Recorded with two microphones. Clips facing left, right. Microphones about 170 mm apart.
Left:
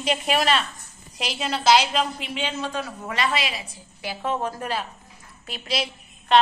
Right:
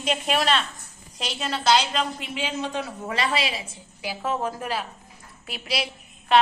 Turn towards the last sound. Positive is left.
turn(degrees=-5)  # may be behind; listen again after turning